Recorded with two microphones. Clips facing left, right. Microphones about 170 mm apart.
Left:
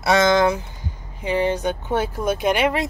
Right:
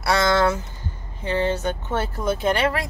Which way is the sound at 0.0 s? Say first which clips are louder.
Left 3 dB; 20° left (ahead or behind).